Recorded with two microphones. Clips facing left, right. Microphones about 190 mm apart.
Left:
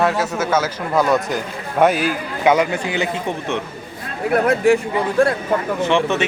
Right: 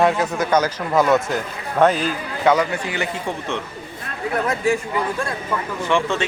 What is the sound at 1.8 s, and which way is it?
Speech, 10° left (ahead or behind).